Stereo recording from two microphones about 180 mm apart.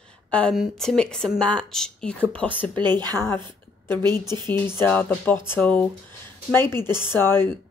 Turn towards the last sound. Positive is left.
turn(degrees=15)  # may be behind; listen again after turning